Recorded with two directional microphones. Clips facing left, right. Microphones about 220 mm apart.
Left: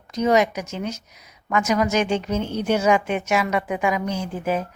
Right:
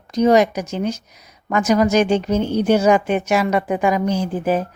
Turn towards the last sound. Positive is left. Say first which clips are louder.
# right 5 dB
turn(degrees=-35)  # may be behind; listen again after turning